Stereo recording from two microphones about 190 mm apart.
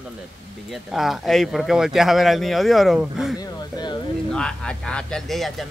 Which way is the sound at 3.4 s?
20° left (ahead or behind).